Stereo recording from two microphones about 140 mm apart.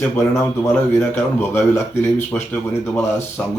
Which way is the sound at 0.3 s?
15° left (ahead or behind).